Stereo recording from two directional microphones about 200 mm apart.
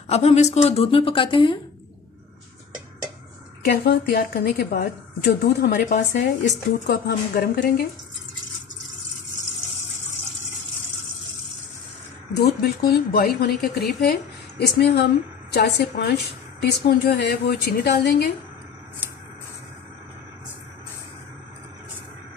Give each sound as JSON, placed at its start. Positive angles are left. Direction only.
{"t": 0.1, "sound": "a woman's voice", "side_deg": 30}
{"t": 3.6, "sound": "a woman's voice", "side_deg": 55}
{"t": 12.4, "sound": "a woman's voice", "side_deg": 50}